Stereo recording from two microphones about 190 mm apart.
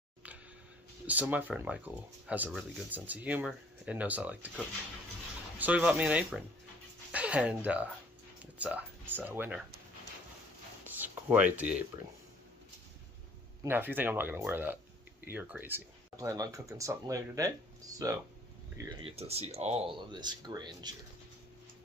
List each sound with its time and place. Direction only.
1.0 s speech: 10° right (ahead or behind)
5.6 s speech: 5° right (ahead or behind)
11.0 s a sound: 10° right (ahead or behind)
11.5 s speech: 5° right (ahead or behind)
13.6 s speech: 10° right (ahead or behind)
19.0 s speech: 30° right (ahead or behind)